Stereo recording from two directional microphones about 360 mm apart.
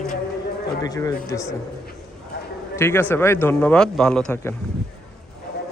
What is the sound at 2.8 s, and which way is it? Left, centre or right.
A man's voice, centre.